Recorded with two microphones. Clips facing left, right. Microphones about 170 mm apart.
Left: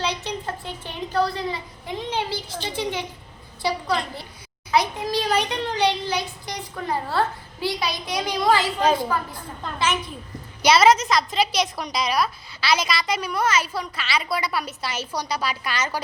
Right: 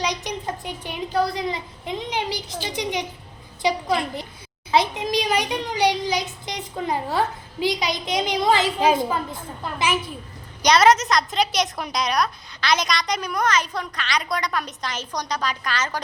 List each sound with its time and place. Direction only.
0.0 s a woman's voice: 15° right (ahead or behind)
10.6 s a woman's voice: 5° left (ahead or behind)